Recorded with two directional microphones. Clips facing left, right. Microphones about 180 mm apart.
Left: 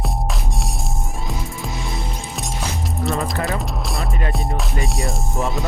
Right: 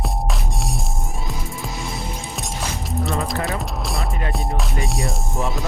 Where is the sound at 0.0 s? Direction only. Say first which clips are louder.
Even; centre (ahead or behind).